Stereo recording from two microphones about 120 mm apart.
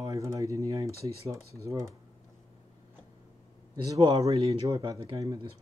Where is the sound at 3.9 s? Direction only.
55° right (ahead or behind).